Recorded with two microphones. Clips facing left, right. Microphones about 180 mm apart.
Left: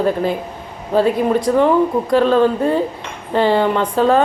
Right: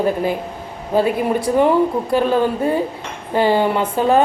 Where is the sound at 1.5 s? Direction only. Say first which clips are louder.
Even; 15° right (ahead or behind).